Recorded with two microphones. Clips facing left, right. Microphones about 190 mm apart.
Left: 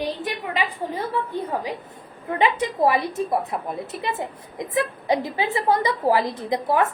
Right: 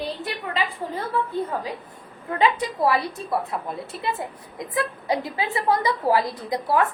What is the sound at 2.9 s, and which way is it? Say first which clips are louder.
A woman's voice: left 1 dB; 20° left (ahead or behind).